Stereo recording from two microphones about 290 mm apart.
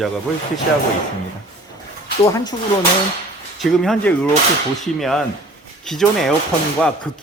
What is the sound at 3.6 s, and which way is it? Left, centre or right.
Speech, centre.